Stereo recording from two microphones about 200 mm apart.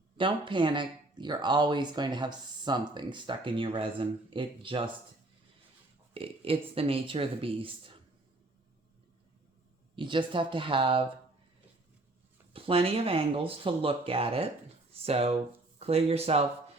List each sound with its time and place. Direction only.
0.2 s speech: 25° right (ahead or behind)
6.1 s speech: 25° right (ahead or behind)
9.9 s speech: 25° right (ahead or behind)
12.5 s speech: 30° right (ahead or behind)